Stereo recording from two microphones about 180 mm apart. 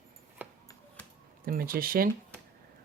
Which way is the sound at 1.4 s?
55° right (ahead or behind).